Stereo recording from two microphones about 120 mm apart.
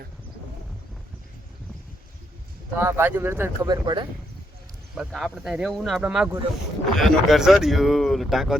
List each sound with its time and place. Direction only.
2.7 s speech: 20° right (ahead or behind)
3.7 s speech: 40° right (ahead or behind)
4.9 s speech: centre (ahead or behind)